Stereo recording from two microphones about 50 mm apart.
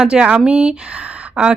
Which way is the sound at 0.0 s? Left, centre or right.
Centre.